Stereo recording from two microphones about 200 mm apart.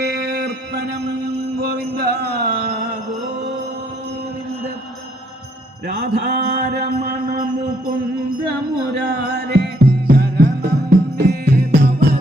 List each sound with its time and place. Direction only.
0.0 s music: 55° right (ahead or behind)
6.0 s mantra: 55° right (ahead or behind)
9.5 s music: 55° right (ahead or behind)